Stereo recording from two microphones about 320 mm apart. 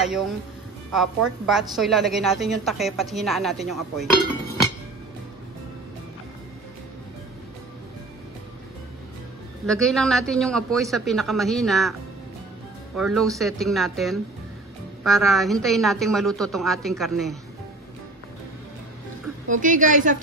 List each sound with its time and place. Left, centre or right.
0.0 s speech: centre
9.7 s speech: centre
19.5 s a woman's voice: right